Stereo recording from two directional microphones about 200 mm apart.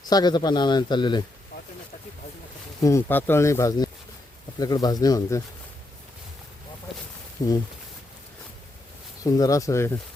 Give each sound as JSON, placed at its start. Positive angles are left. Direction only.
{"t": 0.0, "sound": "speech", "side_deg": 20}
{"t": 2.8, "sound": "speech", "side_deg": 10}
{"t": 9.2, "sound": "speech", "side_deg": 20}